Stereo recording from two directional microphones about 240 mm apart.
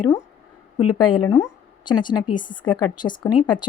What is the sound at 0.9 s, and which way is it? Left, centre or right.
A woman's voice, centre.